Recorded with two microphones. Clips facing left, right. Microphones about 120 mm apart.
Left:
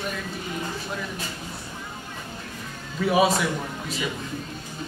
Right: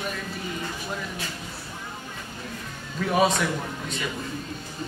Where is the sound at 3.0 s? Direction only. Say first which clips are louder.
Left 2 dB; 5° left (ahead or behind).